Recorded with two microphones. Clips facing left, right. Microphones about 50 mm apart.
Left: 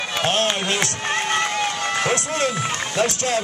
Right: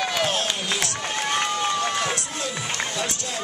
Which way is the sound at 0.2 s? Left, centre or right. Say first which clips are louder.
Left 4 dB; left.